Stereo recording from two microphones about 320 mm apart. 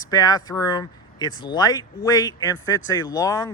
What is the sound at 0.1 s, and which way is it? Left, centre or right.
A man's voice, centre.